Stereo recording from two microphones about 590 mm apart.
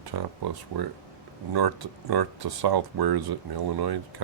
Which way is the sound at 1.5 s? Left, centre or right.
Right.